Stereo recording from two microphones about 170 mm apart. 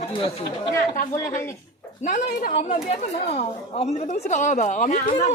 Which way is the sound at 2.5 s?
40° left (ahead or behind).